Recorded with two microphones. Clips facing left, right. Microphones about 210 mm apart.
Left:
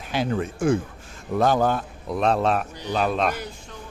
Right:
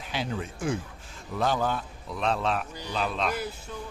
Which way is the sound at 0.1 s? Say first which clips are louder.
Left 8 dB; 50° left (ahead or behind).